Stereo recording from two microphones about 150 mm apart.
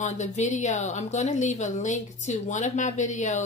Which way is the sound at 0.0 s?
50° left (ahead or behind).